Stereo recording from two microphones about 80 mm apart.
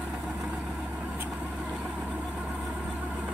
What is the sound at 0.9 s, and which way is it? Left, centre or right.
Vehicle, centre.